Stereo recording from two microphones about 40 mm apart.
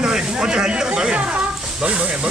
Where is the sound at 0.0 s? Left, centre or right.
Centre.